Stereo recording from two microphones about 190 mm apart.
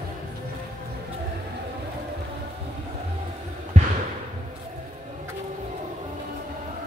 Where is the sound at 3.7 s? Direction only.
35° right (ahead or behind).